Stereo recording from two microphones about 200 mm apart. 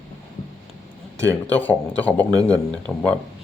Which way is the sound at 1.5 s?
10° left (ahead or behind).